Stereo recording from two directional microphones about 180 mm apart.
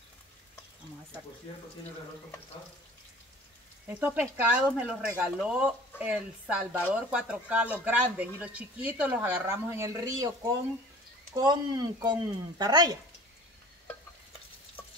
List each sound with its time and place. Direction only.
3.8 s speech: 10° right (ahead or behind)